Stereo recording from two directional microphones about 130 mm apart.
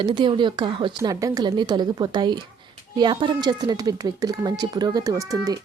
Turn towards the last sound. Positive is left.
turn(degrees=-25)  # may be behind; listen again after turning